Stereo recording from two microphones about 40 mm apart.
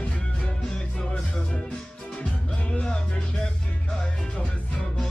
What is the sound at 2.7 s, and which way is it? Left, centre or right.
Music, left.